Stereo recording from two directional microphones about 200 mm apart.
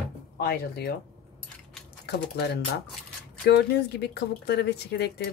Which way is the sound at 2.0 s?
55° left (ahead or behind).